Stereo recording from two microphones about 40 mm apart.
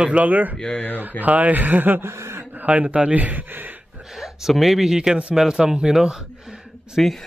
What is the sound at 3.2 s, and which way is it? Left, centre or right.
Speech, right.